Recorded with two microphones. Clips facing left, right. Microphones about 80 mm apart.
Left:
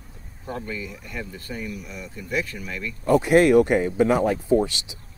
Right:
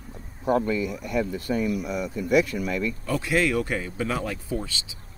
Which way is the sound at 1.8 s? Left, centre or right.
Right.